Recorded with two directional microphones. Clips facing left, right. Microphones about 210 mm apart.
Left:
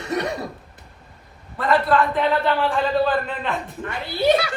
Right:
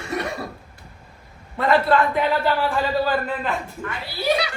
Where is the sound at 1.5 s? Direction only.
25° right (ahead or behind).